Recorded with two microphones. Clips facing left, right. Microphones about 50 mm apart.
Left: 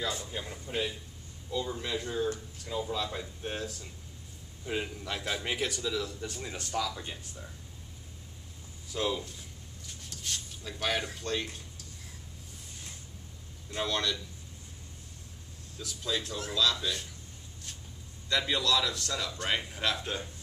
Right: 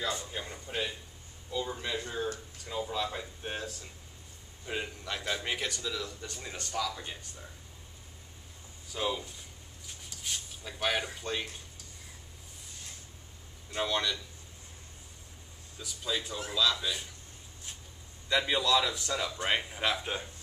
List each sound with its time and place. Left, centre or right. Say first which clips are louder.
0.0 s a man's voice: even; centre
8.9 s speech: left 1 dB; centre
13.7 s speech: even; centre
15.8 s speech: left 1 dB; centre
18.3 s speech: right 1 dB; centre